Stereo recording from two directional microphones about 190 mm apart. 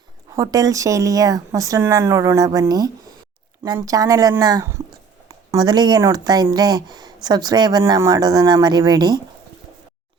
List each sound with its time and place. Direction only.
0.3 s speech: 20° right (ahead or behind)